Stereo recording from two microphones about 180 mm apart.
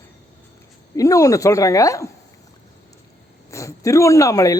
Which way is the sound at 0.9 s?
20° left (ahead or behind).